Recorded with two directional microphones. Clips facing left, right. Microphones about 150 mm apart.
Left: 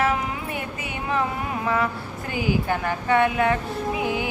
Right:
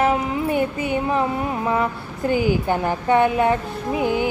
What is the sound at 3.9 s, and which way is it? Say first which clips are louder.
Music: right 8 dB; 35° right (ahead or behind).